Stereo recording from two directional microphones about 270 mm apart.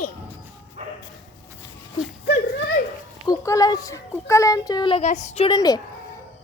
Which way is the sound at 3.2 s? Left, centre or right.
Centre.